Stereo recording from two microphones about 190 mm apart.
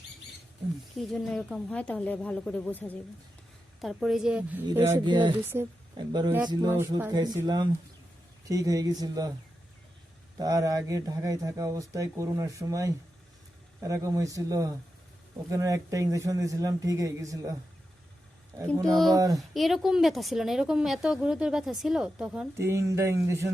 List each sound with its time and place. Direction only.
0.9 s speech: centre (ahead or behind)
4.9 s speech: 20° right (ahead or behind)
10.3 s speech: 20° right (ahead or behind)
19.1 s speech: 20° right (ahead or behind)
19.4 s speech: centre (ahead or behind)
22.6 s speech: 15° right (ahead or behind)